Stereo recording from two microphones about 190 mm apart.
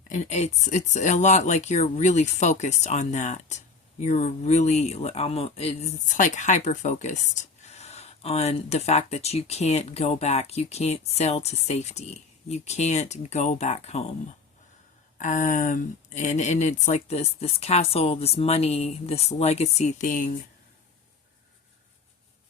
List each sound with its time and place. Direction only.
0.1 s speech: 35° left (ahead or behind)
15.2 s speech: 40° left (ahead or behind)